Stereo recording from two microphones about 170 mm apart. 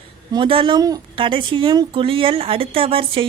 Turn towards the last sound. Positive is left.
turn(degrees=-30)  # may be behind; listen again after turning